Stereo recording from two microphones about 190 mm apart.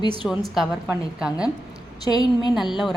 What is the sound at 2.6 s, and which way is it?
Speech, centre (ahead or behind).